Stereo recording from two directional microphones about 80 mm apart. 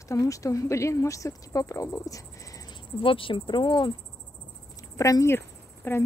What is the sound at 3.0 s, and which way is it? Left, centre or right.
Speech, left.